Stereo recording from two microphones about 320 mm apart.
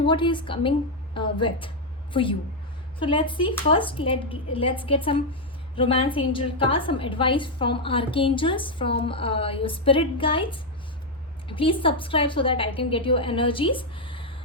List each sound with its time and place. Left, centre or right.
0.0 s a woman's voice: centre